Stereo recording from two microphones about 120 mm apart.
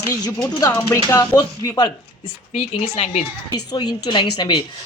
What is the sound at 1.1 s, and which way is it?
Speech, 35° left (ahead or behind).